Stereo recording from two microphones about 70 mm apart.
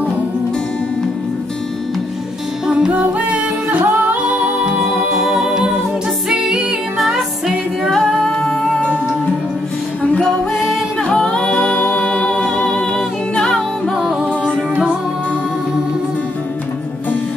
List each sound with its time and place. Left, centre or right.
2.6 s music: centre
3.8 s singing: right
5.1 s music: centre
8.0 s humming: centre
10.1 s music: centre
11.1 s a capella: centre
11.5 s a capella: left
12.0 s humming: centre
13.9 s music: centre